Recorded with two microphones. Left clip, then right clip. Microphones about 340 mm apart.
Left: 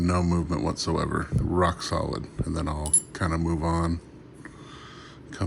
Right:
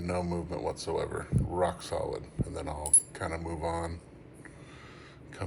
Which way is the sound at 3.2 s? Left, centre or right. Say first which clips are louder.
Left 10 dB; left.